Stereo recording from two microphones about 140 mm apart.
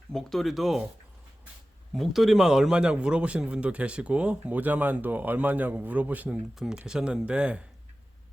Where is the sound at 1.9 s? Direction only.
Centre (ahead or behind).